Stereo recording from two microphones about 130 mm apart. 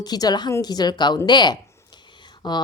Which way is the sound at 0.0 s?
30° left (ahead or behind).